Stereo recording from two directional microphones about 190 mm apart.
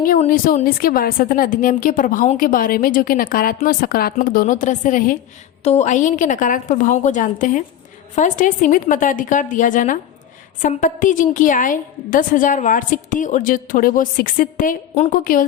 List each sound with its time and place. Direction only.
0.0 s a woman's voice: 45° left (ahead or behind)